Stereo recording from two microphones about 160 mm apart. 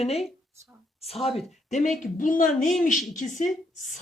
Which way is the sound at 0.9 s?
40° left (ahead or behind).